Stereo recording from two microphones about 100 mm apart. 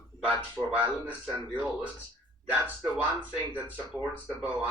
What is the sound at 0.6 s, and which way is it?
Speech, centre (ahead or behind).